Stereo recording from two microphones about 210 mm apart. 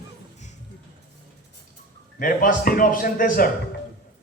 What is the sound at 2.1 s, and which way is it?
A man's voice, 40° left (ahead or behind).